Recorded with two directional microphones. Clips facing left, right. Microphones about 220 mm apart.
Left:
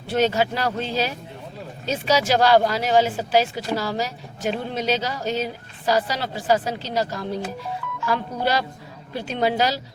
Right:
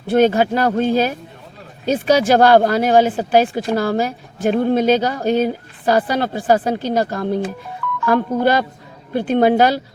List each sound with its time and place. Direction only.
0.1 s speech: 50° right (ahead or behind)